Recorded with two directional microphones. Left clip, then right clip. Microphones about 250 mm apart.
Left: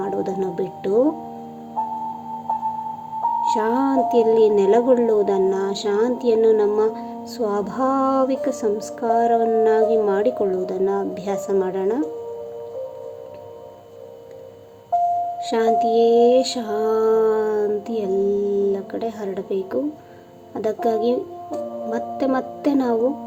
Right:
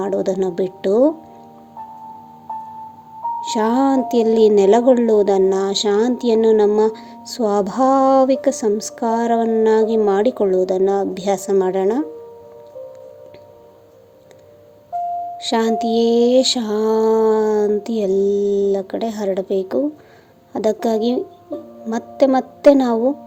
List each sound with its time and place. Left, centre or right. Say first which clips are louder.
0.0 s a woman's voice: right 5 dB; centre
3.5 s a woman's voice: right 2 dB; centre
15.4 s a woman's voice: right 2 dB; centre